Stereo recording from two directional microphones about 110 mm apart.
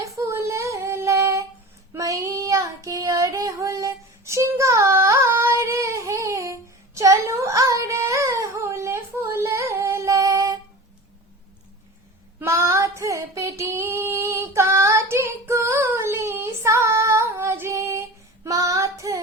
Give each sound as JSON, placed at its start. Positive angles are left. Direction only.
{"t": 0.0, "sound": "child singing", "side_deg": -30}
{"t": 12.4, "sound": "female singing", "side_deg": -25}